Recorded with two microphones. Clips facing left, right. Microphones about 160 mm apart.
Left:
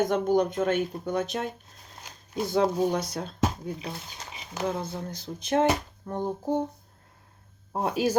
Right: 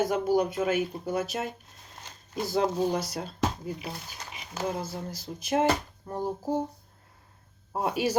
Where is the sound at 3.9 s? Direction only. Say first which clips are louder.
Left 1 dB; 25° left (ahead or behind).